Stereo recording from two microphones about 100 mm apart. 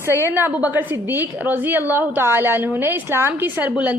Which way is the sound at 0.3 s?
20° right (ahead or behind).